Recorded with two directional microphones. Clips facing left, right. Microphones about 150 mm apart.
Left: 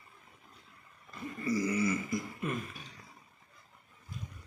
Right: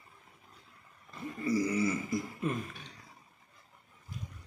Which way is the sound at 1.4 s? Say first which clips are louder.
Right 1 dB; 30° right (ahead or behind).